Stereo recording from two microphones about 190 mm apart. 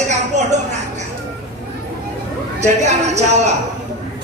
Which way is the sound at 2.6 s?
35° right (ahead or behind).